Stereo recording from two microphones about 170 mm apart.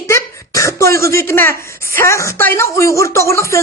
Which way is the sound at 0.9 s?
15° left (ahead or behind).